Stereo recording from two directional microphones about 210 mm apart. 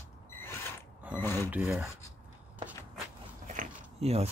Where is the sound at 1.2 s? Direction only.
10° left (ahead or behind).